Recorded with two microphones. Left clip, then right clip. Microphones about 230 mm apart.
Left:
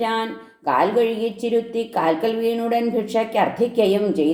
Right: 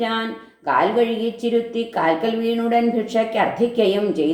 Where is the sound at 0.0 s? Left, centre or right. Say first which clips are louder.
Left 1 dB; left.